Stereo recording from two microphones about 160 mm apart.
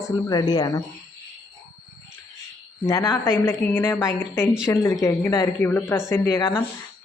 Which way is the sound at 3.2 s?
15° left (ahead or behind).